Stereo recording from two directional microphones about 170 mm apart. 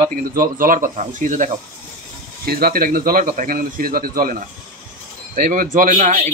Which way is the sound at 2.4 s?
60° right (ahead or behind).